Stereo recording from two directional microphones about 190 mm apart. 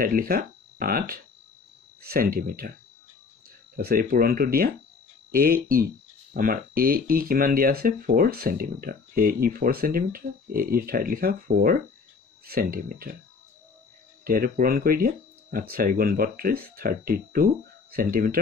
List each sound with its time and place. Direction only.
0.0 s speech: 50° right (ahead or behind)
3.7 s speech: 50° right (ahead or behind)
14.2 s speech: 50° right (ahead or behind)